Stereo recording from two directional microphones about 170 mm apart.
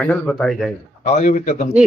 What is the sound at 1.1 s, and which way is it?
Speech, 45° left (ahead or behind).